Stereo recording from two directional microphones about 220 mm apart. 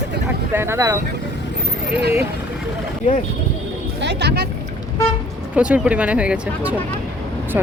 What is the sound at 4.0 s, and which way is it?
Speech, 50° right (ahead or behind).